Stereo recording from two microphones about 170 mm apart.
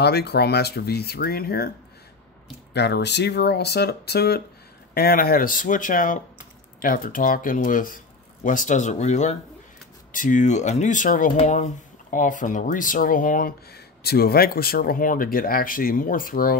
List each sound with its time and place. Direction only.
0.0 s speech: 75° left (ahead or behind)
2.7 s speech: 85° left; by 16.5 s 55° left (ahead or behind)